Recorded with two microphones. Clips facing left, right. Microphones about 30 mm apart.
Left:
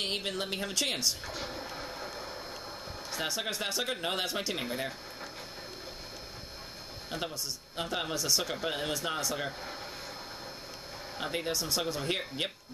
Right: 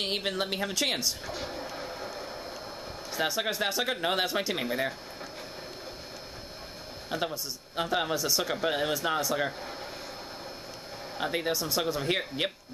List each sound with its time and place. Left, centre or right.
0.0 s speech: centre
7.1 s speech: centre
11.1 s speech: centre